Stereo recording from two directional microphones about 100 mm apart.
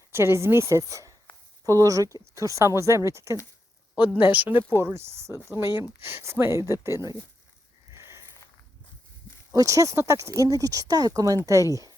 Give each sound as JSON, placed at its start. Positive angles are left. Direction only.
{"t": 0.1, "sound": "speech", "side_deg": -25}
{"t": 4.2, "sound": "speech", "side_deg": -20}
{"t": 7.9, "sound": "a sound", "side_deg": -25}
{"t": 9.5, "sound": "speech", "side_deg": -30}